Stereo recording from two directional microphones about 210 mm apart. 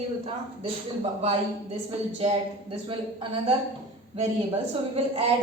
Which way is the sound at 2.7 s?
25° right (ahead or behind).